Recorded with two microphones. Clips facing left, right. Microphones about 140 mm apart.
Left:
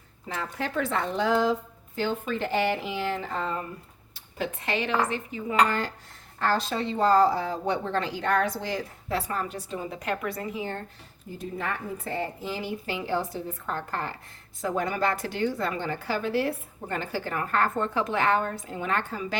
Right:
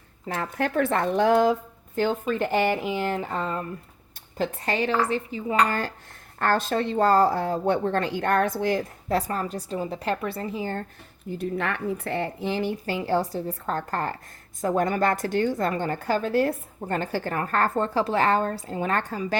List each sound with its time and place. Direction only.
0.3 s a woman's voice: 55° right (ahead or behind)
4.4 s speech: 40° right (ahead or behind)
6.4 s a woman's voice: 50° right (ahead or behind); by 10.8 s 35° right (ahead or behind)
11.3 s speech: 70° right (ahead or behind)
12.8 s a woman's voice: 45° right (ahead or behind)